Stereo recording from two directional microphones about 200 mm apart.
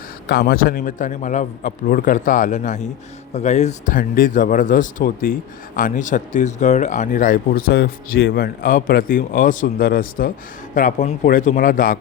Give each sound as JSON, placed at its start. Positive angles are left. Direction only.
{"t": 0.3, "sound": "a man's voice", "side_deg": 50}